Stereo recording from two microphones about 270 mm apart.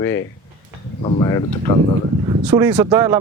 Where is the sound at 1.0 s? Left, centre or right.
Centre.